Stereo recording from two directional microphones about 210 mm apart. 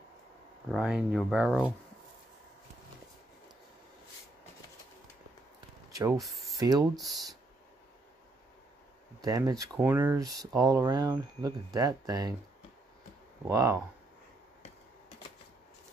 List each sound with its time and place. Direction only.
0.7 s speech: centre (ahead or behind)
6.1 s speech: centre (ahead or behind)
6.6 s speech: 20° right (ahead or behind)
9.2 s speech: 15° right (ahead or behind)
13.5 s speech: 15° right (ahead or behind)